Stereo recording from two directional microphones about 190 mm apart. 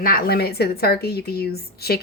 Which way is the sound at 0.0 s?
55° left (ahead or behind).